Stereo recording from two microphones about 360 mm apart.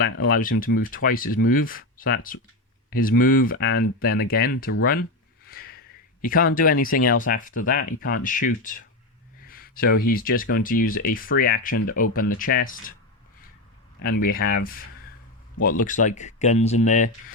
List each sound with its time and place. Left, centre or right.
0.0 s speech: left
5.5 s a sound: left
6.2 s speech: left
14.0 s speech: left